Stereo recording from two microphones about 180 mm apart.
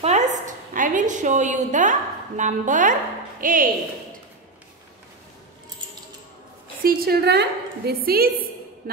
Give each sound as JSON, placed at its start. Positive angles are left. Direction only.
{"t": 0.0, "sound": "a woman's voice", "side_deg": -40}
{"t": 6.8, "sound": "a woman's voice", "side_deg": -55}